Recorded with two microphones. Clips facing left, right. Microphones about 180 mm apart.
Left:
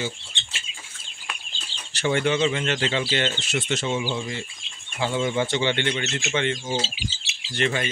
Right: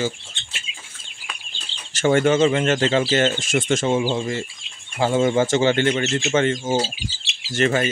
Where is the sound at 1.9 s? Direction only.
45° right (ahead or behind).